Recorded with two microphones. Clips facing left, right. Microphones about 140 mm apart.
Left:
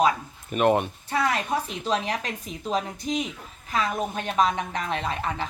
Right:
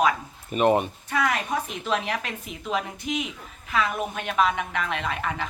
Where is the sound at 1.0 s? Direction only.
30° left (ahead or behind).